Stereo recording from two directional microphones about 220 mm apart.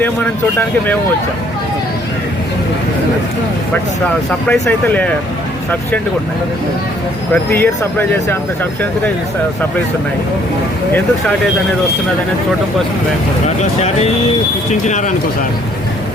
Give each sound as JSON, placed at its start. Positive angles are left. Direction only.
{"t": 4.4, "sound": "speech", "side_deg": 5}
{"t": 7.5, "sound": "speech", "side_deg": 10}
{"t": 13.6, "sound": "speech", "side_deg": 30}